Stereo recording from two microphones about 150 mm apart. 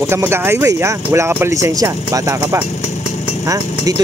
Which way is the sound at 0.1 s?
15° right (ahead or behind).